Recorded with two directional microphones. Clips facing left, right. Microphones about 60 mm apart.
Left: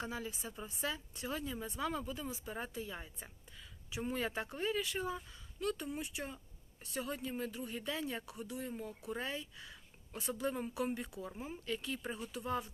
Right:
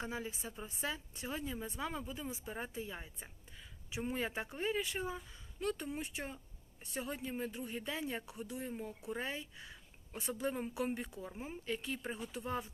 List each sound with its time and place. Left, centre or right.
0.0 s speech: right
9.0 s a woman's voice: right